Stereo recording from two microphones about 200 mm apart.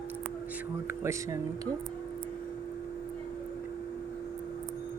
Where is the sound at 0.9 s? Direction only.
15° right (ahead or behind).